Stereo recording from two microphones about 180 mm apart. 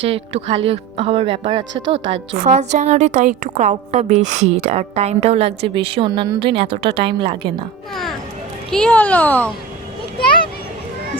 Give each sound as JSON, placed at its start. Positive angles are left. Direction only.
{"t": 0.0, "sound": "a woman's voice", "side_deg": -35}
{"t": 8.7, "sound": "a child's voice", "side_deg": 5}